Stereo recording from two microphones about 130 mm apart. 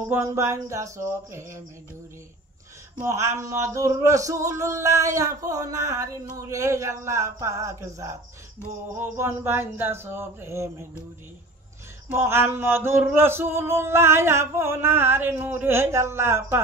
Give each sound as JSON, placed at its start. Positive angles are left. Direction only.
{"t": 0.1, "sound": "music", "side_deg": -20}
{"t": 3.0, "sound": "music", "side_deg": -20}
{"t": 12.1, "sound": "music", "side_deg": -20}